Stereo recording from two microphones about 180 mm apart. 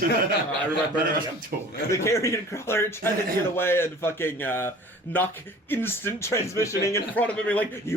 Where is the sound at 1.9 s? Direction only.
15° left (ahead or behind).